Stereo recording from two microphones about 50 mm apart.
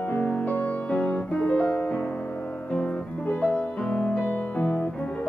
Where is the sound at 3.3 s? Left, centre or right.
Left.